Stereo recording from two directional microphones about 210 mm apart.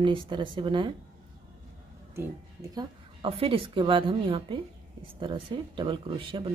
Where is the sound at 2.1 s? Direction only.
15° right (ahead or behind).